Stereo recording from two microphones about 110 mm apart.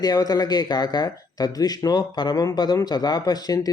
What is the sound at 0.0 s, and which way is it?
Speech, 35° left (ahead or behind).